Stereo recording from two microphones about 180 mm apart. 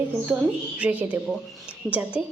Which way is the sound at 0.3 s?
5° right (ahead or behind).